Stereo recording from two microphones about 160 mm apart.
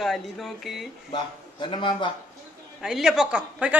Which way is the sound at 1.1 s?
30° left (ahead or behind).